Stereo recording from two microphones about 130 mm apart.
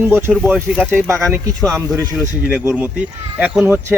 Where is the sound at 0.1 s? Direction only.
20° right (ahead or behind).